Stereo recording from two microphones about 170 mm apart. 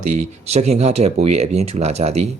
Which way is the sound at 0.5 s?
40° right (ahead or behind).